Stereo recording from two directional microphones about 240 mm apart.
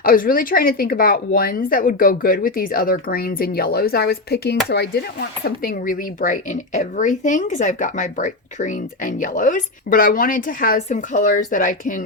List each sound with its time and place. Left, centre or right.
0.0 s speech: left